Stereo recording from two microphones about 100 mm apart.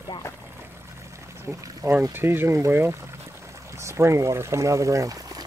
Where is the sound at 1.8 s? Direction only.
20° right (ahead or behind).